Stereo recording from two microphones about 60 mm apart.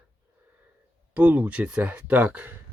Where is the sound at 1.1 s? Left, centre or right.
Right.